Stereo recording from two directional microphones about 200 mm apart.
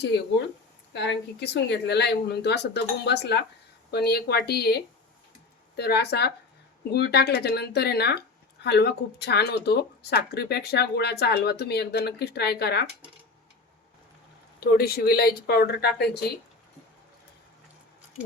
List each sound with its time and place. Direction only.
0.9 s speech: 60° left (ahead or behind)
14.6 s speech: 50° left (ahead or behind)